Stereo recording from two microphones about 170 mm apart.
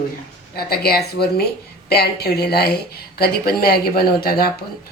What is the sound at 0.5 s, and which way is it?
Speech, 65° left (ahead or behind).